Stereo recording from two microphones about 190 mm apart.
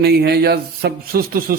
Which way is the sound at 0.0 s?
60° right (ahead or behind).